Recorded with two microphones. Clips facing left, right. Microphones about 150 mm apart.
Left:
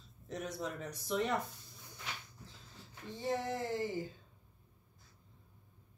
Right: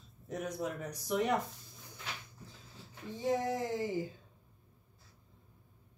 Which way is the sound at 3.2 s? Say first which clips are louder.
Right 4 dB; 15° right (ahead or behind).